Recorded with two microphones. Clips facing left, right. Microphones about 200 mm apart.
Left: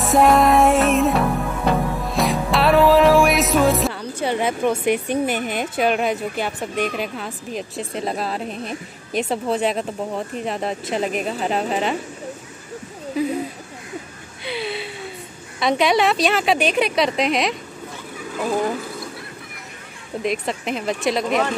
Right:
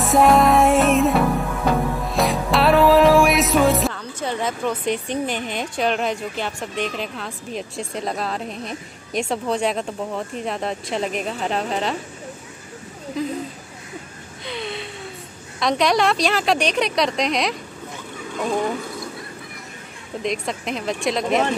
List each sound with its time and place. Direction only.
0.0 s music: centre (ahead or behind)
3.9 s a woman's voice: 10° left (ahead or behind)
6.7 s speech: 50° left (ahead or behind)
7.0 s speech: 5° left (ahead or behind)
13.2 s a woman's voice: 5° left (ahead or behind)
14.4 s a sound: 5° left (ahead or behind)
15.6 s speech: centre (ahead or behind)
20.2 s speech: centre (ahead or behind)